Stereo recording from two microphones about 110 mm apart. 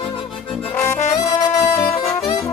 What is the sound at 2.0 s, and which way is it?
Saxophone, 55° left (ahead or behind).